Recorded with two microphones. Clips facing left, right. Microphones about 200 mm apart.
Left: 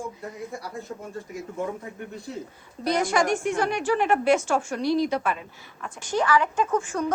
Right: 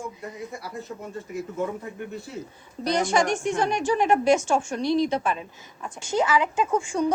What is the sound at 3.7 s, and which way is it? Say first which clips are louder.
A woman's voice: right 2 dB; 15° right (ahead or behind).